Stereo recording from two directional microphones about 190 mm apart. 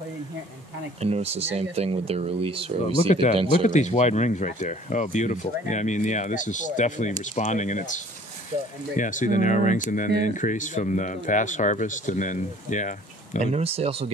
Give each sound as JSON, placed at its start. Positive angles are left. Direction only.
{"t": 1.0, "sound": "speech", "side_deg": -30}
{"t": 3.1, "sound": "speech", "side_deg": 40}
{"t": 13.4, "sound": "speech", "side_deg": -35}